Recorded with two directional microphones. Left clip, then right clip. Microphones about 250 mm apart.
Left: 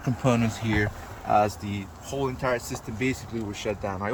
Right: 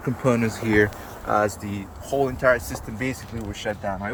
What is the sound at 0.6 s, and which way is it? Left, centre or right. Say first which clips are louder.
Speech: right 11 dB; right.